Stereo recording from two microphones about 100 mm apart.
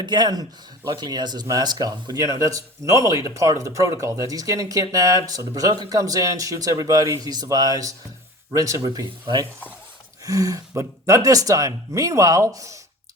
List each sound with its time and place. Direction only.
0.0 s speech: 45° right (ahead or behind)
10.2 s speech: 35° right (ahead or behind)